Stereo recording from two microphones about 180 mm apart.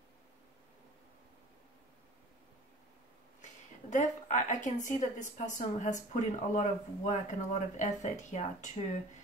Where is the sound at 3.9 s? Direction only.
40° left (ahead or behind).